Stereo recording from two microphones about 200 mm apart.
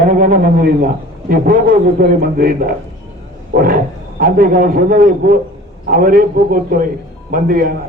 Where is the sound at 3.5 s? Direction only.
45° right (ahead or behind).